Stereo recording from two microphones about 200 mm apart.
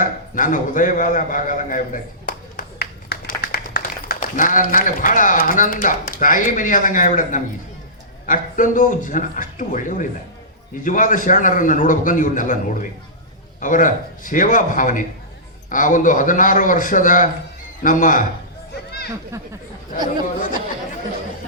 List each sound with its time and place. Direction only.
0.0 s a man's voice: 40° left (ahead or behind)
18.9 s a sound: 55° left (ahead or behind)
19.3 s speech: 15° right (ahead or behind)